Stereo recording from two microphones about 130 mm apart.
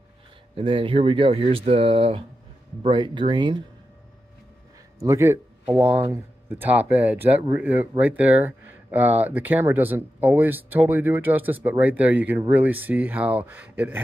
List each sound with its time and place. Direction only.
0.6 s speech: 40° right (ahead or behind)
5.0 s speech: 20° right (ahead or behind)